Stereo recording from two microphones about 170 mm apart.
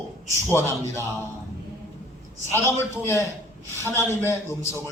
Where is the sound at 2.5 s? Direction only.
15° left (ahead or behind).